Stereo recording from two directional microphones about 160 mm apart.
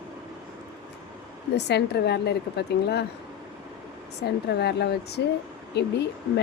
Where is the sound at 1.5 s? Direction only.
90° left.